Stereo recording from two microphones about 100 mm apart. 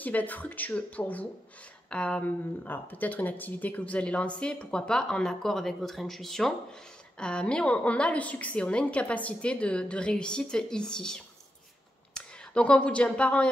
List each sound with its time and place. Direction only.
0.0 s speech: 15° left (ahead or behind)